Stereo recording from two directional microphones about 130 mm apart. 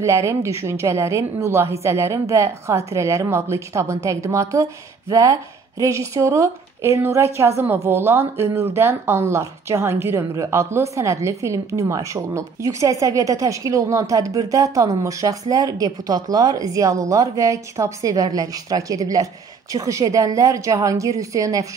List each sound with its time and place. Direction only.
0.0 s speech: 20° right (ahead or behind)